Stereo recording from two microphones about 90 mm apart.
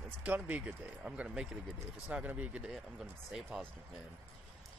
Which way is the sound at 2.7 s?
5° right (ahead or behind).